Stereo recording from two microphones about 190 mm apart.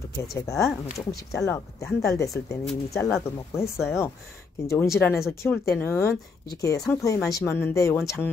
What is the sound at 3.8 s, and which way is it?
Speech, 15° left (ahead or behind).